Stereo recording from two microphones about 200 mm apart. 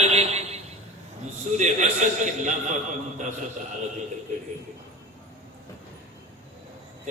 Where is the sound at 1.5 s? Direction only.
35° right (ahead or behind).